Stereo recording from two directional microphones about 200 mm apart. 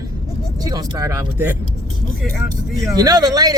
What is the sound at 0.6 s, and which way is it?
Speech, 15° right (ahead or behind).